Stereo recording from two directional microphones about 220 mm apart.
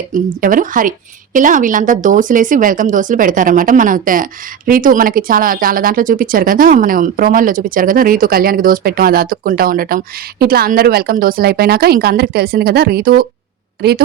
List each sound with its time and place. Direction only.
0.1 s a woman's voice: 40° right (ahead or behind)